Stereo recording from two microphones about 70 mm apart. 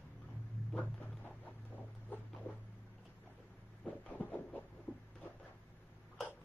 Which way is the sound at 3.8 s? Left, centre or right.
Left.